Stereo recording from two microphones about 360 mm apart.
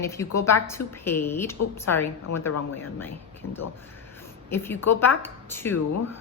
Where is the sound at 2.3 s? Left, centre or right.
Left.